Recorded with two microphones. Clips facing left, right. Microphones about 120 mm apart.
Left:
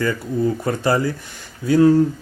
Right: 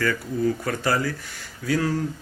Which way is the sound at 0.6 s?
20° left (ahead or behind).